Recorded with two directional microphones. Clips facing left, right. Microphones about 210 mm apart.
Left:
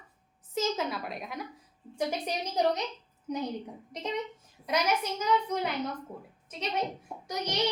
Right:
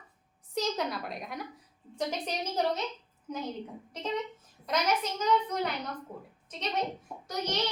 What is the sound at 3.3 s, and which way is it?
Speech, 20° left (ahead or behind).